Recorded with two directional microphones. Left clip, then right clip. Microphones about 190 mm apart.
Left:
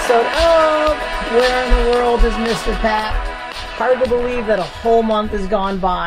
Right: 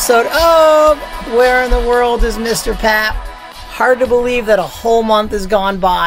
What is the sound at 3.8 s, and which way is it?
Speech, 25° right (ahead or behind).